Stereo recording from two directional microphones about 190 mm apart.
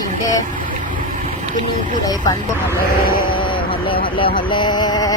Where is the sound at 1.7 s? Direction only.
40° right (ahead or behind).